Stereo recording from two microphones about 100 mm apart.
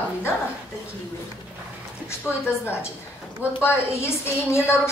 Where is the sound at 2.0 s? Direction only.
25° left (ahead or behind).